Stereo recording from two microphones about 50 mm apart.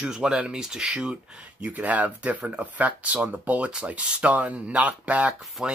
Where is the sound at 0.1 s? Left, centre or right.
Centre.